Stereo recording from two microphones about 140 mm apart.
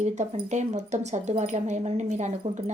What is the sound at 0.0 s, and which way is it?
Speech, 55° right (ahead or behind).